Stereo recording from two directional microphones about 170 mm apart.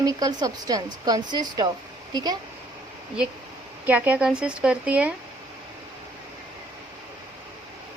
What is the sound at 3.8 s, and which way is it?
Speech, 10° right (ahead or behind).